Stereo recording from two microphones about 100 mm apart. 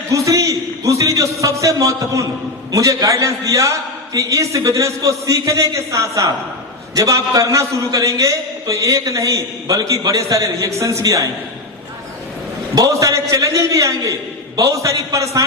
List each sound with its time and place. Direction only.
0.1 s a man's voice: 30° right (ahead or behind)
12.7 s a man's voice: 35° right (ahead or behind)